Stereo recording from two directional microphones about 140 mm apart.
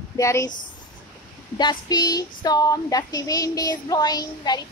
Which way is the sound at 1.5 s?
30° left (ahead or behind).